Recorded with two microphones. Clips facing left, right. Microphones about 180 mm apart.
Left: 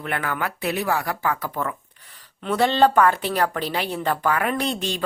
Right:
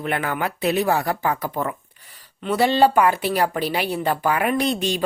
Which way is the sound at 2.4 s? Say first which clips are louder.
Right 1 dB; 5° right (ahead or behind).